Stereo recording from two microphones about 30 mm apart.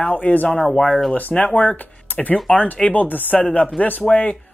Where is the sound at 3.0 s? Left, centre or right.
Left.